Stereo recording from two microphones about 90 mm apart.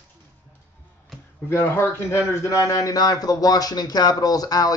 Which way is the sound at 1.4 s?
25° left (ahead or behind).